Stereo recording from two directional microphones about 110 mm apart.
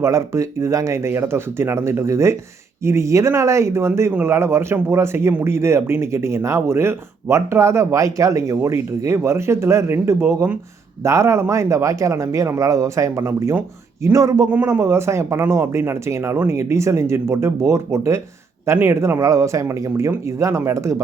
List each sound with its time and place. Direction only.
0.0 s speech: 25° right (ahead or behind)
14.5 s speech: 20° right (ahead or behind)